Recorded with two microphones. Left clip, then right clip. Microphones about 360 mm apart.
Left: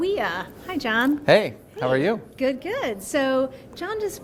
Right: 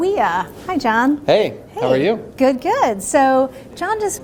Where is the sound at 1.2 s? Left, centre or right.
Left.